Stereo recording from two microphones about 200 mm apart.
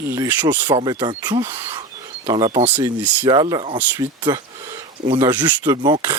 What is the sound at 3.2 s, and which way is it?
Speech, 20° right (ahead or behind).